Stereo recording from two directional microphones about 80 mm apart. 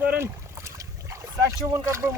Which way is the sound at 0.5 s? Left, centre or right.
Right.